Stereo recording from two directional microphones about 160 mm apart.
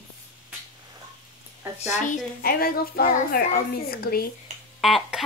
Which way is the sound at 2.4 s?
70° left (ahead or behind).